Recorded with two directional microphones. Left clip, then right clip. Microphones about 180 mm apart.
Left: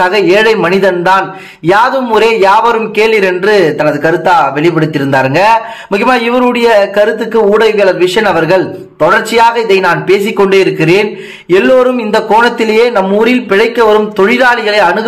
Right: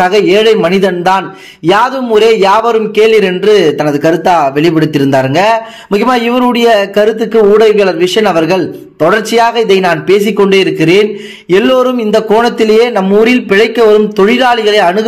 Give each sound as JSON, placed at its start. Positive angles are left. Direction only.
{"t": 0.0, "sound": "a man's voice", "side_deg": -35}